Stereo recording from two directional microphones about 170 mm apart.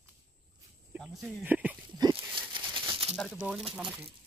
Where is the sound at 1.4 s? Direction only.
10° right (ahead or behind).